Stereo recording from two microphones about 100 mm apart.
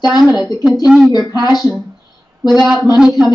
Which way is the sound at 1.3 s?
40° left (ahead or behind).